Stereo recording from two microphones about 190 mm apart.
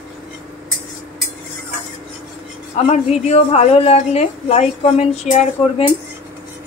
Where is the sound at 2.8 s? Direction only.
35° left (ahead or behind).